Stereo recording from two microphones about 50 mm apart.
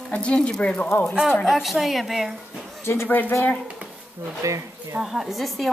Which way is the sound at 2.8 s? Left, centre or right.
Left.